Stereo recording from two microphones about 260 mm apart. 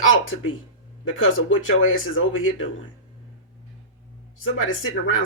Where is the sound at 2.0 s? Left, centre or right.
Left.